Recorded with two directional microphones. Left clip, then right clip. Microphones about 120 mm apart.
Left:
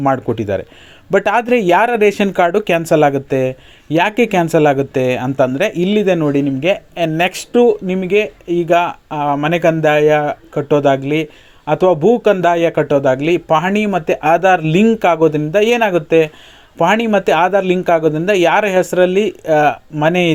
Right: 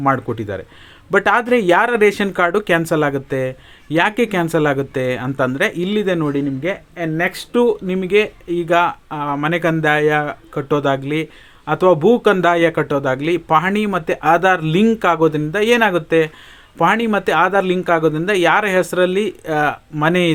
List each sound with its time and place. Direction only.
0.0 s speech: 25° left (ahead or behind)
7.5 s speech: 10° left (ahead or behind)